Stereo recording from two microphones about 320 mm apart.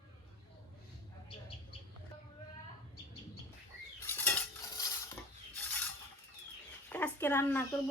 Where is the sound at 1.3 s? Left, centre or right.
Centre.